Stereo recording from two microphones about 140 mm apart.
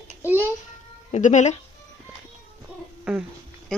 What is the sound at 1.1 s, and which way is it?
Speech, 60° left (ahead or behind).